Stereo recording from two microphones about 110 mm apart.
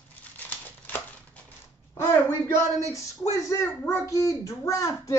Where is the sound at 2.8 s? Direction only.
30° left (ahead or behind).